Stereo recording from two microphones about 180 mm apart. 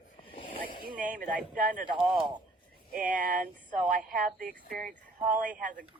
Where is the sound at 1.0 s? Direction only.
50° right (ahead or behind).